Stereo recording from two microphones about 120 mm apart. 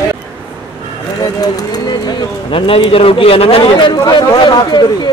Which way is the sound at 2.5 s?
50° left (ahead or behind).